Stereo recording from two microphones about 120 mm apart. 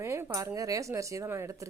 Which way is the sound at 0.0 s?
20° right (ahead or behind).